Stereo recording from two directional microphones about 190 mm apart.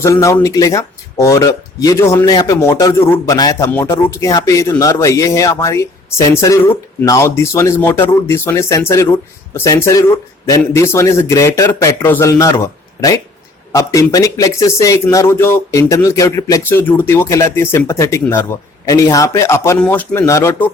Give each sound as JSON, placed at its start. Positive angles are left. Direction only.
{"t": 0.0, "sound": "speech", "side_deg": 15}